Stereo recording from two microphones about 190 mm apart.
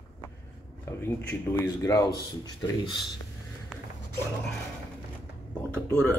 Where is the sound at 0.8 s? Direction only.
15° left (ahead or behind).